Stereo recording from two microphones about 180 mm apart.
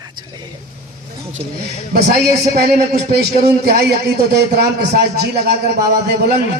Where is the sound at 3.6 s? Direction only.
65° right (ahead or behind).